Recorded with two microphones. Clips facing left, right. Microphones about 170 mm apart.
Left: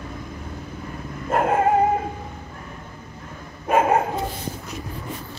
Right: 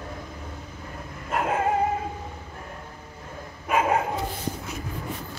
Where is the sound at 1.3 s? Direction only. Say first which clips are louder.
Left 6 dB; 50° left (ahead or behind).